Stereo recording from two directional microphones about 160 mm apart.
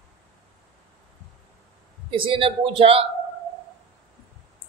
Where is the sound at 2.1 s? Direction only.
35° right (ahead or behind).